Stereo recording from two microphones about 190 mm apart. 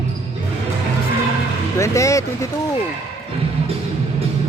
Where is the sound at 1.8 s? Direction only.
15° left (ahead or behind).